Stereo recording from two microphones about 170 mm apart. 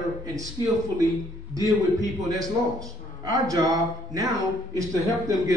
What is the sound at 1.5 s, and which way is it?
A man's voice, 20° right (ahead or behind).